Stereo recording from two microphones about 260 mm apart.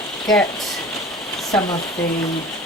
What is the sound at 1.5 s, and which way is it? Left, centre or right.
Speech, centre.